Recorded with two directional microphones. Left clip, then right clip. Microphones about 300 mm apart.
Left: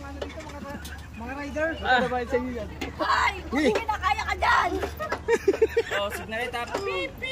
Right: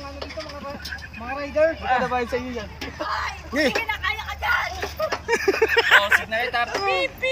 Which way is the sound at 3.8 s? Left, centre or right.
Left.